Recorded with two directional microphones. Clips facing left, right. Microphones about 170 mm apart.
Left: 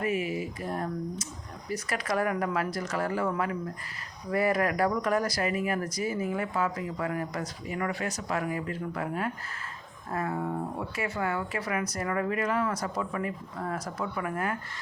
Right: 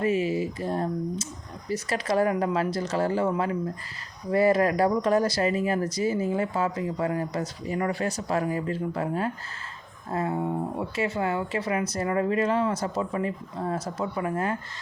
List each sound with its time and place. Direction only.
0.0 s speech: 30° right (ahead or behind)